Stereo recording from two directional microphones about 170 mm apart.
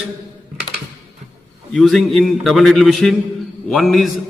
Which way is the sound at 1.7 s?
5° left (ahead or behind).